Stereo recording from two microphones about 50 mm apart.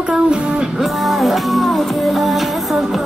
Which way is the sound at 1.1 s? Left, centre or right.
Centre.